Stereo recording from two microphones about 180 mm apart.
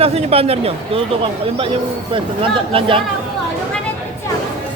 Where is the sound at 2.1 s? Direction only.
30° right (ahead or behind).